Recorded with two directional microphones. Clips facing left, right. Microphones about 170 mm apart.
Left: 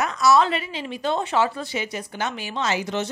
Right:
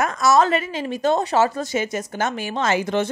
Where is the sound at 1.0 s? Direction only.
45° right (ahead or behind).